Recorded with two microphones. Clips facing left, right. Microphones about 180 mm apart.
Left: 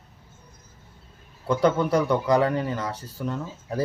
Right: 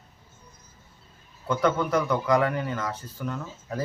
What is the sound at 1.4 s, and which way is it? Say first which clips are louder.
Speech: left 3 dB; 30° left (ahead or behind).